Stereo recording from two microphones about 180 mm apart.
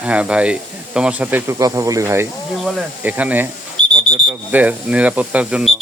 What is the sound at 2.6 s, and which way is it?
Speech, 5° right (ahead or behind).